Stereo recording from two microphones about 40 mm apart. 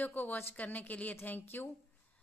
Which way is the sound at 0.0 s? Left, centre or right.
Left.